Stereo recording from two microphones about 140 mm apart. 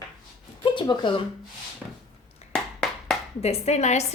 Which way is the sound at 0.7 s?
35° left (ahead or behind).